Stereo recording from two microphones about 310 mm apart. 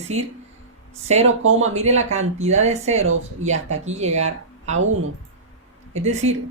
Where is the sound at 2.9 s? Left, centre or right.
Right.